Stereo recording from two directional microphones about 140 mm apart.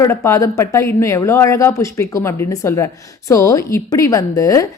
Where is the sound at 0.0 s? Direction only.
20° left (ahead or behind).